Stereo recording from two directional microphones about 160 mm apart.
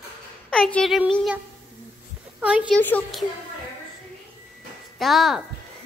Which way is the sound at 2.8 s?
10° left (ahead or behind).